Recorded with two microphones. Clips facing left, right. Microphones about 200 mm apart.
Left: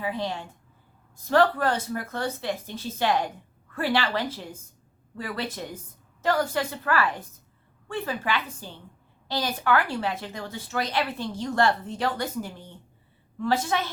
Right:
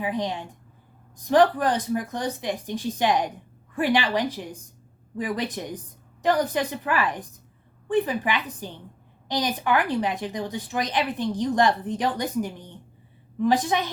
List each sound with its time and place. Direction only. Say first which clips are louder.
0.0 s speech: right 2 dB; 15° right (ahead or behind)